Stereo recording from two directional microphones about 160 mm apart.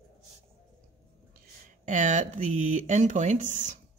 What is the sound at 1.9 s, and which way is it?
Speech, 50° right (ahead or behind).